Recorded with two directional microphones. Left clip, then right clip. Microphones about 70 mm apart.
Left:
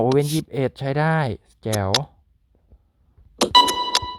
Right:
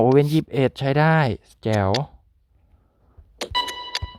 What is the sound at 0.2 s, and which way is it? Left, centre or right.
Speech, right.